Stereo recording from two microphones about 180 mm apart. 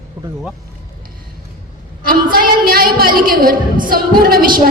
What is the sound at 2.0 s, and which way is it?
A woman's voice, 55° right (ahead or behind).